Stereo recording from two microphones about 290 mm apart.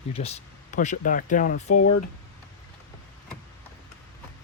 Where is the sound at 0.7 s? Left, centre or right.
Left.